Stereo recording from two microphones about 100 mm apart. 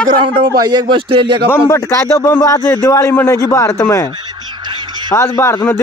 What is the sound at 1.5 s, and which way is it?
A man's voice, 25° left (ahead or behind).